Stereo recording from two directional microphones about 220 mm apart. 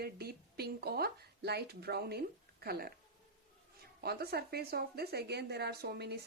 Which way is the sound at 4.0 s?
45° right (ahead or behind).